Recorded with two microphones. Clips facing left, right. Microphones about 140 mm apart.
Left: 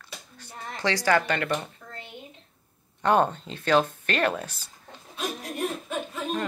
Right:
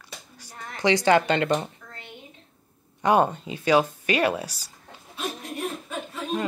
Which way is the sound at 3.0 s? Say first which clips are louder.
Right 2 dB; 10° right (ahead or behind).